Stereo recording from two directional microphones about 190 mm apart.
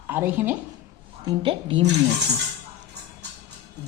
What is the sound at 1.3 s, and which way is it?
Speech, 25° right (ahead or behind).